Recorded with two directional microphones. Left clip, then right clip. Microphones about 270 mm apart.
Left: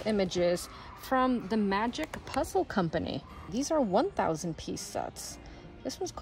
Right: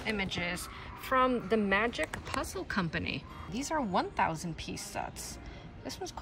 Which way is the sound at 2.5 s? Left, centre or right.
Centre.